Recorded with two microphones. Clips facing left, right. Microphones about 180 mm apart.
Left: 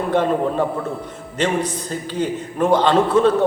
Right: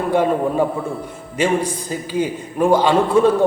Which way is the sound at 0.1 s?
10° right (ahead or behind).